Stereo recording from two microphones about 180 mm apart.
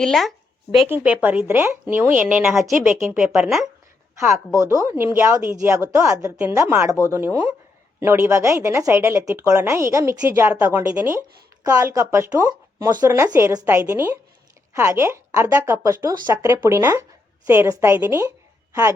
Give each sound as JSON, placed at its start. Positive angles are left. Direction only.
{"t": 0.0, "sound": "speech", "side_deg": 0}
{"t": 0.9, "sound": "speech", "side_deg": -10}
{"t": 4.1, "sound": "a woman's voice", "side_deg": -15}